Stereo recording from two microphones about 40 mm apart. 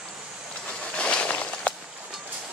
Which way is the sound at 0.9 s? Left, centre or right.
Left.